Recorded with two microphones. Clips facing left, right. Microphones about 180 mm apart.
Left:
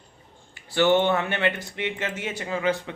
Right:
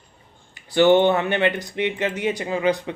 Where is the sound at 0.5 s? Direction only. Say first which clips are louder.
Right 5 dB; 20° right (ahead or behind).